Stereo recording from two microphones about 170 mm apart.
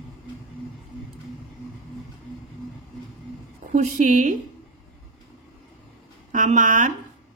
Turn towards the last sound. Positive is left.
turn(degrees=-50)  # may be behind; listen again after turning